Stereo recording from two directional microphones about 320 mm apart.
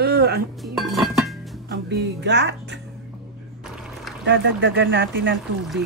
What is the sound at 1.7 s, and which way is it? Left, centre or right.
Speech, right.